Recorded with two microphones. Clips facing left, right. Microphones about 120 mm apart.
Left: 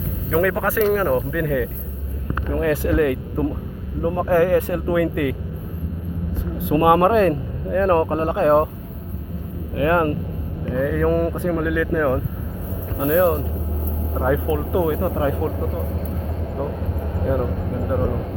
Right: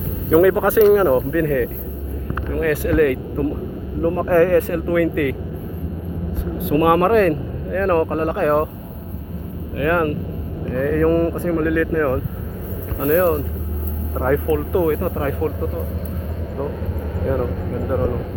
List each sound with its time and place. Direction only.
0.3 s speech: 15° right (ahead or behind)
1.1 s speech: 5° left (ahead or behind); by 5.4 s 20° left (ahead or behind)
6.8 s speech: 15° left (ahead or behind)
9.7 s speech: 25° left (ahead or behind)
10.8 s speech: 10° left (ahead or behind)
17.2 s speech: 10° left (ahead or behind)